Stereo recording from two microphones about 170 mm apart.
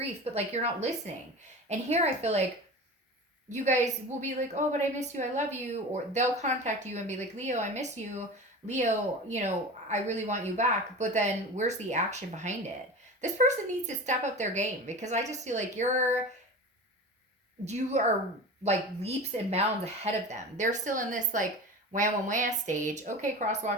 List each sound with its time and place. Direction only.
0.0 s speech: 40° right (ahead or behind)
3.5 s a woman's voice: 45° right (ahead or behind)
17.7 s a woman's voice: 45° right (ahead or behind)